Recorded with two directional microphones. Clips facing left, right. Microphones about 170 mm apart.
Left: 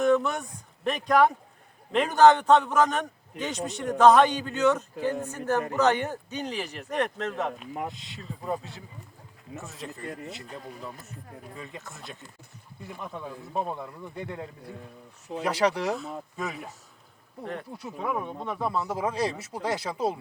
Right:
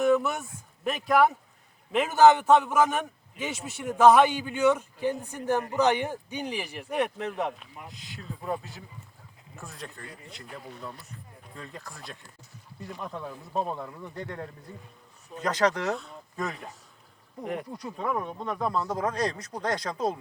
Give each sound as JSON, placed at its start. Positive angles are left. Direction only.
{"t": 0.0, "sound": "a man's voice", "side_deg": -5}
{"t": 7.9, "sound": "speech", "side_deg": 0}
{"t": 17.4, "sound": "speech", "side_deg": -15}
{"t": 17.7, "sound": "speech", "side_deg": 5}